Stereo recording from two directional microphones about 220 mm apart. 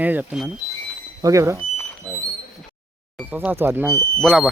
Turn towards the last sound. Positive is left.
turn(degrees=0)  # may be behind; listen again after turning